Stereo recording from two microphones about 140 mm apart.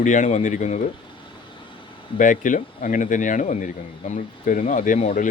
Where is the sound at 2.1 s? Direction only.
70° left (ahead or behind).